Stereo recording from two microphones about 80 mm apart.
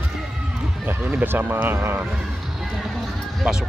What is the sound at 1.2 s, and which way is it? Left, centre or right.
Speech, right.